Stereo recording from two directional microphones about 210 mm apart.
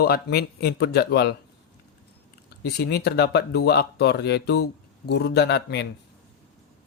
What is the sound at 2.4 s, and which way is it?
Speech, 50° left (ahead or behind).